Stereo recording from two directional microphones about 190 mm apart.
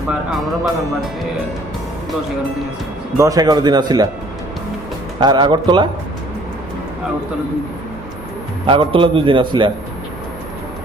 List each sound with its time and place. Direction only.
3.2 s a man's voice: 20° right (ahead or behind)
5.2 s a man's voice: 25° right (ahead or behind)
8.6 s a man's voice: 25° right (ahead or behind)